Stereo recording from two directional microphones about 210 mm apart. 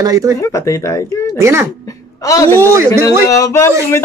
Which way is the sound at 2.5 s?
10° right (ahead or behind).